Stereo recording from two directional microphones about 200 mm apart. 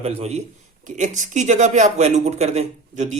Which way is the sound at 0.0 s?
30° right (ahead or behind).